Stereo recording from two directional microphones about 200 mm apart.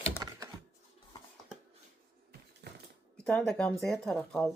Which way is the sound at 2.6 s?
55° right (ahead or behind).